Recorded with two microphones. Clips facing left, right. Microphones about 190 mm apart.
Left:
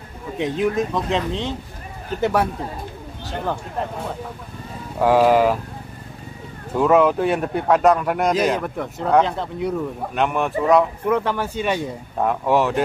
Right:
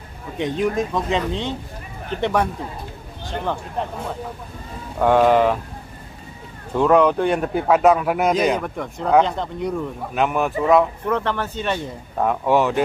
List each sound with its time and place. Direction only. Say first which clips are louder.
0.4 s a man's voice: even; centre (ahead or behind)
5.0 s a man's voice: even; 5° left (ahead or behind)
6.7 s a man's voice: even; 5° left (ahead or behind)
12.3 s a man's voice: right 1 dB; centre (ahead or behind)